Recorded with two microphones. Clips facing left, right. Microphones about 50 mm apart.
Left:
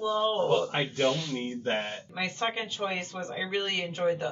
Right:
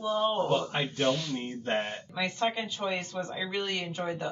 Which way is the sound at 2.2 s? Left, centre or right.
Left.